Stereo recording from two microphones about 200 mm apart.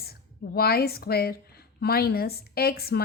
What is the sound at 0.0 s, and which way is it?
A woman's voice, 50° left (ahead or behind).